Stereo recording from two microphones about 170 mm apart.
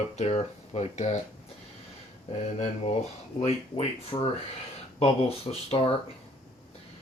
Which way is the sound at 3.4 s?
40° left (ahead or behind).